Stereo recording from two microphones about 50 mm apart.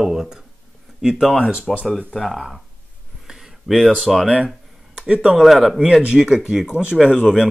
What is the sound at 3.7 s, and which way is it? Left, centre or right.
Speech, centre.